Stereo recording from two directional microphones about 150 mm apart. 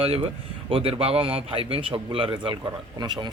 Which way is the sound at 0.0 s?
40° right (ahead or behind).